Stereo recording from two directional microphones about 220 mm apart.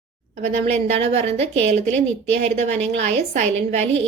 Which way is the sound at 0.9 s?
25° right (ahead or behind).